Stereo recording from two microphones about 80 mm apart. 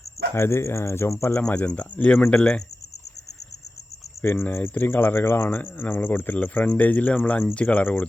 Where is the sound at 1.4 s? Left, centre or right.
Centre.